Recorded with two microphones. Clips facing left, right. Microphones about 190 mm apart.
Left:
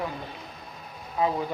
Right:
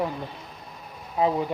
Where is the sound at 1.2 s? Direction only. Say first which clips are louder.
Right 3 dB; 30° right (ahead or behind).